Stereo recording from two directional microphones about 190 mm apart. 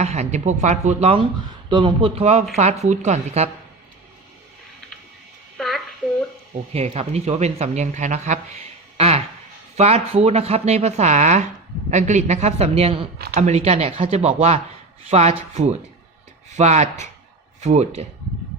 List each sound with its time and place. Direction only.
0.0 s speech: 35° right (ahead or behind)
5.5 s child singing: centre (ahead or behind)
6.7 s speech: 35° right (ahead or behind)